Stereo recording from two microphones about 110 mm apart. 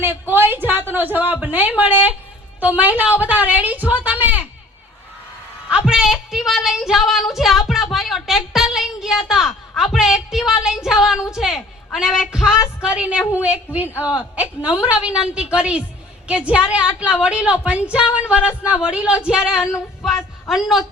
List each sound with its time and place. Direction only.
0.0 s a woman's voice: 20° right (ahead or behind)
5.6 s a sound: 5° right (ahead or behind)
11.3 s a woman's voice: 5° right (ahead or behind)